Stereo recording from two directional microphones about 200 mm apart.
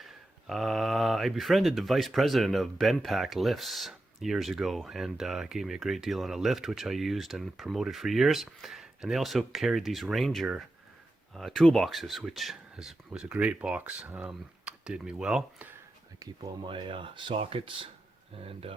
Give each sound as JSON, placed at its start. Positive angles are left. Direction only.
{"t": 0.0, "sound": "speech", "side_deg": 0}
{"t": 16.2, "sound": "speech", "side_deg": -20}